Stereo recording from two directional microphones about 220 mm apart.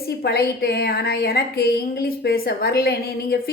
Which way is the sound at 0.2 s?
45° left (ahead or behind).